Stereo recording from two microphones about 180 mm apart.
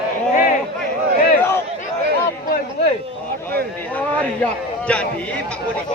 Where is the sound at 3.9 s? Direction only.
5° left (ahead or behind).